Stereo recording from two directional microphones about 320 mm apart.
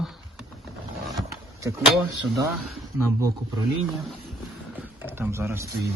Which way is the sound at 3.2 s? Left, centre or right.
Centre.